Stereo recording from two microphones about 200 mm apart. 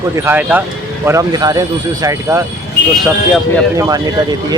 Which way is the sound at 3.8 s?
20° right (ahead or behind).